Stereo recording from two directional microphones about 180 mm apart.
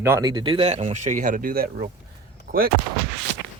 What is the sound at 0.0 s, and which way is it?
Speech, 15° right (ahead or behind).